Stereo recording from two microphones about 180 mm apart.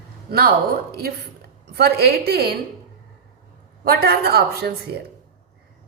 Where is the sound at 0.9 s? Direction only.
60° right (ahead or behind).